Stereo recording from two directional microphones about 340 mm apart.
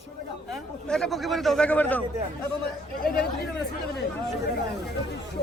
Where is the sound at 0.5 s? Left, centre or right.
Centre.